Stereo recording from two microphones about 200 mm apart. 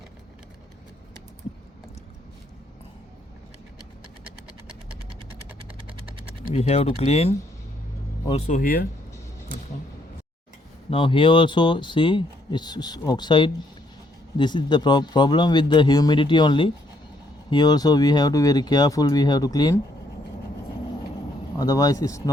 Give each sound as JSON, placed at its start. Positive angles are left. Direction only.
{"t": 6.5, "sound": "speech", "side_deg": 30}
{"t": 10.9, "sound": "speech", "side_deg": 25}
{"t": 21.6, "sound": "speech", "side_deg": 20}